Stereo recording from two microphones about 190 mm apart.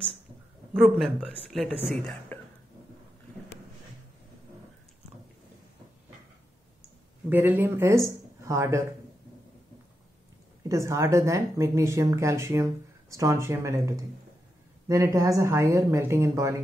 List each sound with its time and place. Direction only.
0.7 s speech: centre (ahead or behind)
7.2 s a woman's voice: 10° right (ahead or behind)
10.7 s a woman's voice: 15° right (ahead or behind)